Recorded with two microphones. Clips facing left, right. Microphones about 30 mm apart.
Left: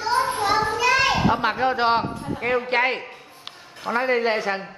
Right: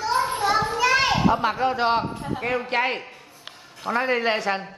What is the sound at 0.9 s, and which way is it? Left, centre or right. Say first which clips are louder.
Children playing: even; left.